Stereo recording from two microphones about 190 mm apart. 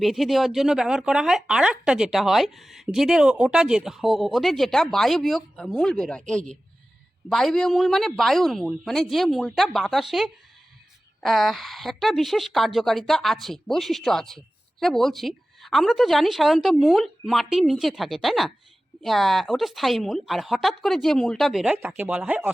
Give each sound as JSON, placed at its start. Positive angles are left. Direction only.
{"t": 0.0, "sound": "a woman's voice", "side_deg": 0}